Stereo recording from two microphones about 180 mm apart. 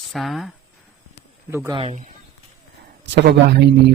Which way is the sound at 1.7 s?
35° right (ahead or behind).